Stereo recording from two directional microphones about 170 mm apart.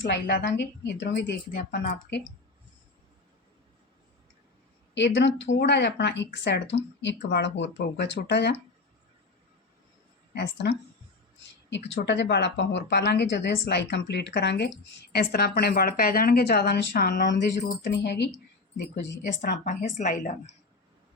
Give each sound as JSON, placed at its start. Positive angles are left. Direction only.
{"t": 0.0, "sound": "a woman's voice", "side_deg": 90}
{"t": 1.5, "sound": "a woman's voice", "side_deg": 55}
{"t": 4.9, "sound": "a woman's voice", "side_deg": 90}
{"t": 10.3, "sound": "a woman's voice", "side_deg": 75}
{"t": 11.7, "sound": "a woman's voice", "side_deg": 90}
{"t": 15.1, "sound": "a woman's voice", "side_deg": 65}
{"t": 18.0, "sound": "a woman's voice", "side_deg": 80}
{"t": 19.2, "sound": "a woman's voice", "side_deg": 55}